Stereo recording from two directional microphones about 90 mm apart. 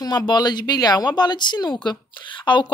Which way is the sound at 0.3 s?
50° left (ahead or behind).